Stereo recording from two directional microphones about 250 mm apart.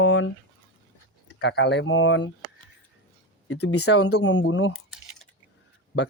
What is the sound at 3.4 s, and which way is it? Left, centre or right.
Speech, left.